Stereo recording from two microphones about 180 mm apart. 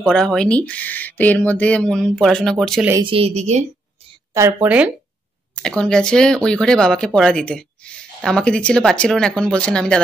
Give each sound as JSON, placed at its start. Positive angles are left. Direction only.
{"t": 0.0, "sound": "speech", "side_deg": 5}
{"t": 3.0, "sound": "speech", "side_deg": -30}
{"t": 4.3, "sound": "speech", "side_deg": -15}
{"t": 5.6, "sound": "speech", "side_deg": 5}